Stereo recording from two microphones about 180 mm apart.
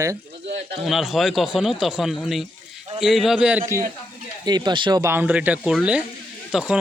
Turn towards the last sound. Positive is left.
turn(degrees=-5)  # may be behind; listen again after turning